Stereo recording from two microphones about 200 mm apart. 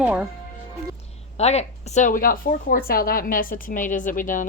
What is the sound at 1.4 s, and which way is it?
A woman's voice, 35° left (ahead or behind).